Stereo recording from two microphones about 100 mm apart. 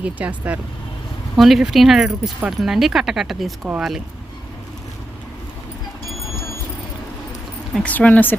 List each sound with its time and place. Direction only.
0.0 s speech: 15° right (ahead or behind)
1.4 s speech: centre (ahead or behind)
7.9 s speech: 15° left (ahead or behind)